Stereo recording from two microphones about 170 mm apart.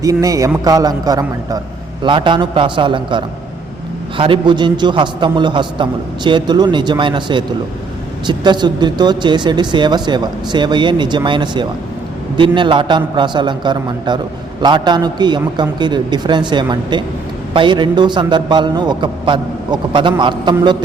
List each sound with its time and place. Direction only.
0.0 s speech: 20° right (ahead or behind)